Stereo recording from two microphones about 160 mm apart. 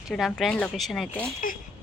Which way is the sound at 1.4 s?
60° left (ahead or behind).